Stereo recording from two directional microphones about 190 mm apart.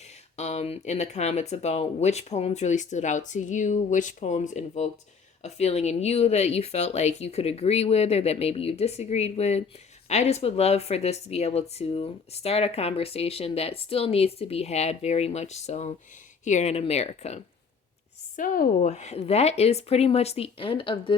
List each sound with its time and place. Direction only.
0.0 s speech: 35° left (ahead or behind)
18.3 s speech: 45° left (ahead or behind); by 21.2 s 25° left (ahead or behind)